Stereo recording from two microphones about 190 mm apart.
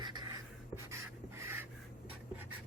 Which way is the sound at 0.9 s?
10° right (ahead or behind).